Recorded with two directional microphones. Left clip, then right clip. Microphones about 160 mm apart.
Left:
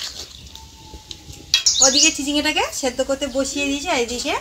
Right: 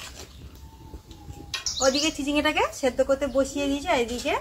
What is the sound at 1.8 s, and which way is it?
Speech, 15° left (ahead or behind).